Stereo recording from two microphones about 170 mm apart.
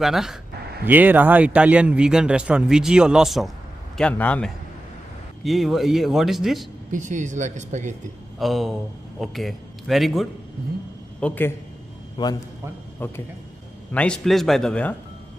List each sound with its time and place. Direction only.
0.0 s a man's voice: centre (ahead or behind)
6.9 s speech: 50° right (ahead or behind)
8.4 s a man's voice: centre (ahead or behind)
12.2 s a man's voice: 30° left (ahead or behind)
13.0 s a man's voice: 10° left (ahead or behind)